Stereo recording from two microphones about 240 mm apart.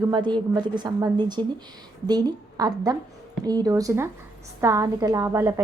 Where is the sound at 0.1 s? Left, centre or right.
Centre.